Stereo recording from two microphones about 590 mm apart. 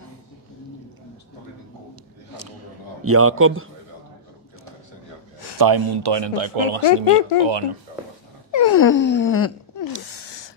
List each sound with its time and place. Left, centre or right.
2.3 s a sound: right
5.6 s speech: right
7.0 s speech: right
7.3 s speech: right
8.5 s wail: left
10.0 s a sound: left